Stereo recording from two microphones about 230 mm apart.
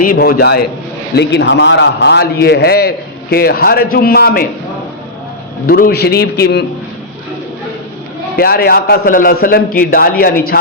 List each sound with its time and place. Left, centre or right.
0.0 s a man's voice: left
5.6 s a man's voice: left
8.4 s a man's voice: left